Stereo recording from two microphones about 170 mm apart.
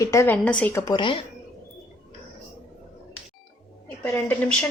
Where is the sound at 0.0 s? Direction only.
15° left (ahead or behind).